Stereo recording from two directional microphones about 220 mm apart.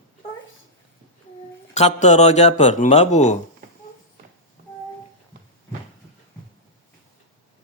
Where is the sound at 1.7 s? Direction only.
30° left (ahead or behind).